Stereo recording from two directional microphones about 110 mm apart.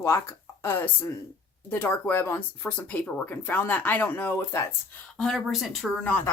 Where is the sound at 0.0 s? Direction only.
25° left (ahead or behind).